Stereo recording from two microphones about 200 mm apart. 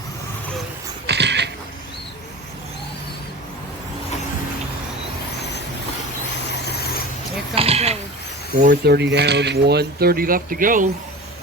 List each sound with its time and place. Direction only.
1.0 s dog: 60° right (ahead or behind)
6.5 s vehicle: 55° left (ahead or behind)
7.5 s a sound: 30° right (ahead or behind)
8.6 s speech: 50° right (ahead or behind)